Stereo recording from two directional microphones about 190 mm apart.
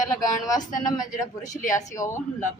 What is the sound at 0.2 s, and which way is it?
A woman's voice, 20° left (ahead or behind).